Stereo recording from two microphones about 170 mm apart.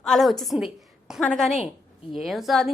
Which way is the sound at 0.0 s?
Centre (ahead or behind).